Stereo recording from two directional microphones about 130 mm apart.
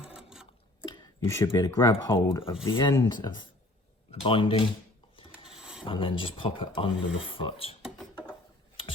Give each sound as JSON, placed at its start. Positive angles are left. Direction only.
{"t": 0.0, "sound": "sewing machine", "side_deg": -5}
{"t": 1.2, "sound": "speech", "side_deg": 20}
{"t": 2.6, "sound": "speech", "side_deg": 40}
{"t": 5.1, "sound": "filing", "side_deg": 40}
{"t": 5.5, "sound": "a sound", "side_deg": -5}
{"t": 5.8, "sound": "speech", "side_deg": 40}
{"t": 7.9, "sound": "rodents", "side_deg": -5}